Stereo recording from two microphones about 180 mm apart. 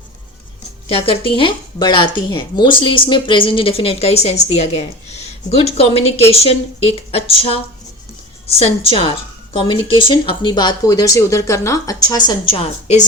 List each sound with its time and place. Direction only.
0.9 s a woman's voice: 30° left (ahead or behind)